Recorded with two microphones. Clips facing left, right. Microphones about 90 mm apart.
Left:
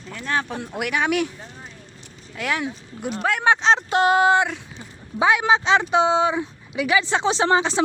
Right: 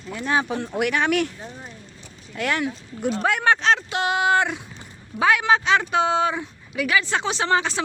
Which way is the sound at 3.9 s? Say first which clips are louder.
Left 5 dB; 40° left (ahead or behind).